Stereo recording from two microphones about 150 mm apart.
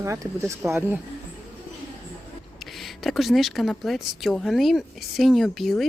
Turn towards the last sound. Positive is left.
turn(degrees=0)  # may be behind; listen again after turning